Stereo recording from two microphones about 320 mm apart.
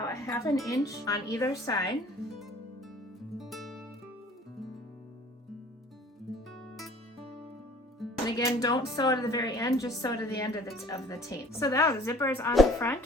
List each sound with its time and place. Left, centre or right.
0.0 s music: centre
0.9 s a woman's voice: centre
3.3 s music: centre
6.3 s music: centre
7.9 s music: centre
8.4 s a woman's voice: centre